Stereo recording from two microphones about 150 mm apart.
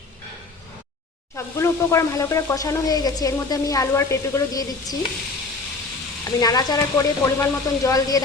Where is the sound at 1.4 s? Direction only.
20° left (ahead or behind).